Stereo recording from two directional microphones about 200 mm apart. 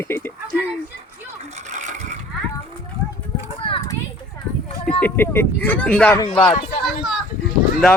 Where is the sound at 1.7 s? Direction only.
35° right (ahead or behind).